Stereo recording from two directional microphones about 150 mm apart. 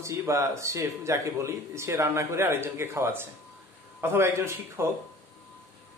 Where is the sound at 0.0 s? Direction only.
20° right (ahead or behind).